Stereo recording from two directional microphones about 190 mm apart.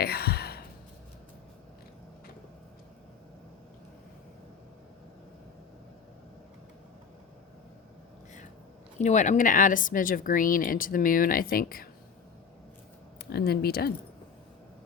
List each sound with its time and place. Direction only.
0.0 s sigh: 55° left (ahead or behind)
9.0 s speech: 40° left (ahead or behind)
13.3 s speech: 55° left (ahead or behind)